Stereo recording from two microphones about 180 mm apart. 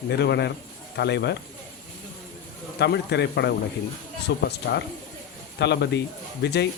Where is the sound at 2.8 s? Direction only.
70° left (ahead or behind).